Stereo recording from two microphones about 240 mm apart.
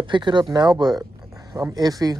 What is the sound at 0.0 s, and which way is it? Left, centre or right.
Speech, centre.